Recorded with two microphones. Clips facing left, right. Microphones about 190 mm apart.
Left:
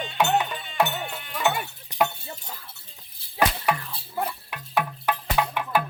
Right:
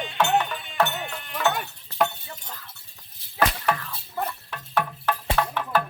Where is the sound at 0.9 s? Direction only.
5° left (ahead or behind).